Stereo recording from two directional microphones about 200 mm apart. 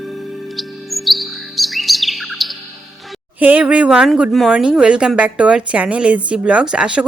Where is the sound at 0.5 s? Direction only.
Centre (ahead or behind).